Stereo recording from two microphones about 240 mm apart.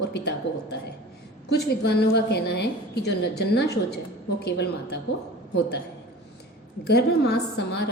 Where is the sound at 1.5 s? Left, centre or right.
Left.